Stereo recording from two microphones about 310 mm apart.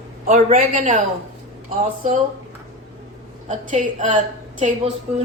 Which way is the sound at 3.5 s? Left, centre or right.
Right.